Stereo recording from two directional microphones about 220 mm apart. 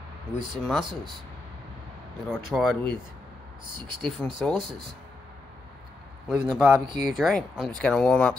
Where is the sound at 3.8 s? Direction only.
90° right.